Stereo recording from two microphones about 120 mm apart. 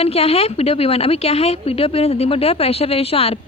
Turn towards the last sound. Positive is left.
turn(degrees=55)  # may be behind; listen again after turning